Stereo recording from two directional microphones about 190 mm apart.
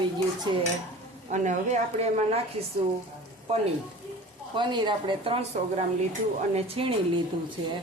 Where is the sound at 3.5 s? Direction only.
35° right (ahead or behind).